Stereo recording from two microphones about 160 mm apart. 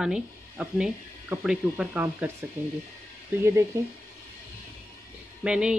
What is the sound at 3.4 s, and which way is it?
Speech, 15° right (ahead or behind).